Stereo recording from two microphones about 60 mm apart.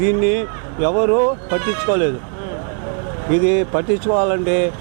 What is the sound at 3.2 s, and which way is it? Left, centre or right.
Speech, right.